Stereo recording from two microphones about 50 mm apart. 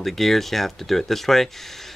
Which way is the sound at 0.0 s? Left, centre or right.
Centre.